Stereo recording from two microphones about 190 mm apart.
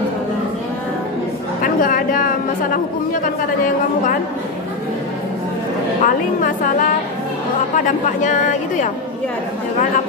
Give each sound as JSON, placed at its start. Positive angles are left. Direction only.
{"t": 1.6, "sound": "speech", "side_deg": 45}
{"t": 6.0, "sound": "a woman's voice", "side_deg": 45}
{"t": 7.7, "sound": "a woman's voice", "side_deg": 40}